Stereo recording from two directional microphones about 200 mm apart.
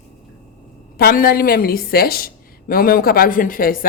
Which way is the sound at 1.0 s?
45° left (ahead or behind).